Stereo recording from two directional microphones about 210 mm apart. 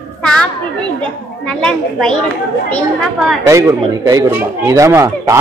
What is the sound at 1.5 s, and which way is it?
A child's voice, 5° left (ahead or behind).